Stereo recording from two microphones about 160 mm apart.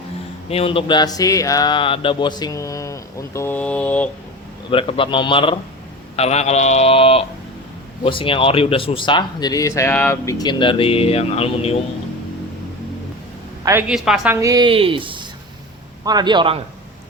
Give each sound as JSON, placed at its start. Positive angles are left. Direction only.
{"t": 0.5, "sound": "a sound", "side_deg": 35}
{"t": 4.7, "sound": "speech", "side_deg": 35}
{"t": 13.8, "sound": "a woman's voice", "side_deg": -5}
{"t": 14.3, "sound": "a man's voice", "side_deg": -20}